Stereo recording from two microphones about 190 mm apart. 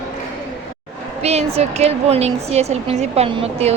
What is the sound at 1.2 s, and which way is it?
A woman's voice, 35° right (ahead or behind).